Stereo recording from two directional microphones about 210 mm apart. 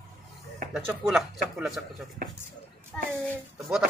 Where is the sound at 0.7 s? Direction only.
Centre (ahead or behind).